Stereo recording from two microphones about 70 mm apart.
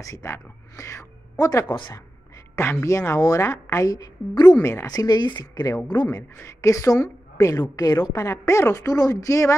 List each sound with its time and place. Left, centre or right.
0.0 s a woman's voice: left
1.3 s speech: left
1.7 s speech: left
2.5 s a woman's voice: left
3.8 s speech: left
4.6 s a woman's voice: left
4.9 s speech: left
6.4 s a woman's voice: left
7.7 s a woman's voice: left
8.2 s a woman's voice: left